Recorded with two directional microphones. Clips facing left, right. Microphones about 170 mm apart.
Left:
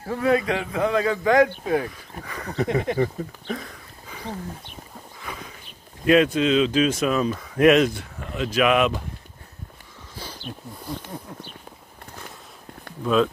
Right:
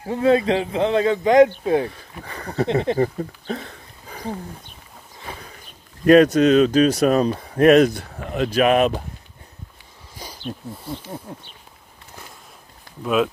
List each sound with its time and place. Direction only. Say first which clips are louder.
0.0 s a man's voice: right 4 dB; 25° right (ahead or behind)
5.2 s a sound: right 1 dB; 30° right (ahead or behind)
6.0 s speech: right 5 dB; 45° right (ahead or behind)
8.5 s speech: right 3 dB; 40° right (ahead or behind)
10.1 s a sound: even; 15° right (ahead or behind)
11.3 s a man's voice: right 2 dB; 30° right (ahead or behind)
13.0 s speech: even; 10° right (ahead or behind)